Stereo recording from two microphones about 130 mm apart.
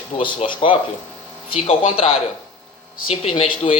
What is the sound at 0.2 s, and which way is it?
Speech, 40° left (ahead or behind).